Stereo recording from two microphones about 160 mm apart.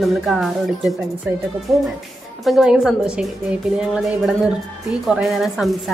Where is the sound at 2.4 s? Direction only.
Centre (ahead or behind).